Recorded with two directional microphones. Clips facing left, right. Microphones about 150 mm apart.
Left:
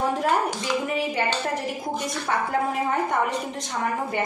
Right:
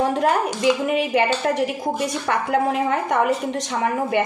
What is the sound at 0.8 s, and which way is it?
A woman's voice, 75° right (ahead or behind).